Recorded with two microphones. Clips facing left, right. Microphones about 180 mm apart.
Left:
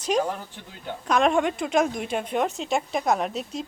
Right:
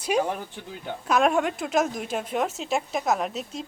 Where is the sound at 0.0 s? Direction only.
10° right (ahead or behind).